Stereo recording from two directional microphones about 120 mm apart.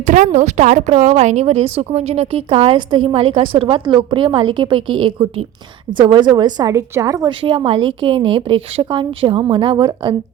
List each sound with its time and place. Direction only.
0.0 s a woman's voice: 90° right; by 7.3 s 25° right (ahead or behind)
7.3 s a woman's voice: 45° right (ahead or behind)